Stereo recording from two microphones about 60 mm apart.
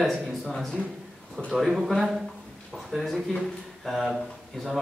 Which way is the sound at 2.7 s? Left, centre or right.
Centre.